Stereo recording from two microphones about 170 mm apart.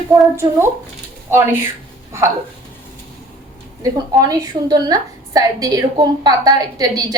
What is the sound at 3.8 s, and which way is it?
A woman's voice, 20° right (ahead or behind).